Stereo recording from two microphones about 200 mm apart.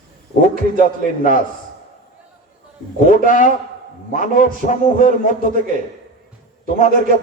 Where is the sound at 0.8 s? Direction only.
40° left (ahead or behind).